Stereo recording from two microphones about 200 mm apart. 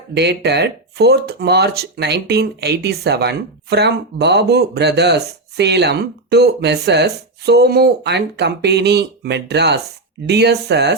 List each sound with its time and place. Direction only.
0.1 s speech: 55° right (ahead or behind)